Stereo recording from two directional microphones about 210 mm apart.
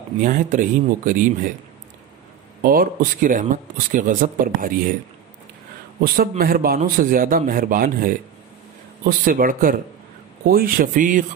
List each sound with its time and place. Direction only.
0.2 s speech: 40° right (ahead or behind)
2.6 s speech: 45° right (ahead or behind)
5.9 s a man's voice: 45° right (ahead or behind)